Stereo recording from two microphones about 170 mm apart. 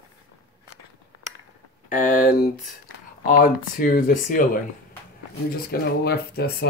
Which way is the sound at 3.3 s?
60° left (ahead or behind).